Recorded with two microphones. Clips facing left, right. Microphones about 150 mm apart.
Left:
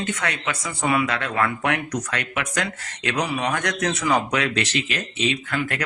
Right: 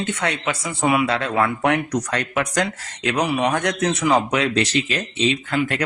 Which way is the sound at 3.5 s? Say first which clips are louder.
Right 3 dB; 30° right (ahead or behind).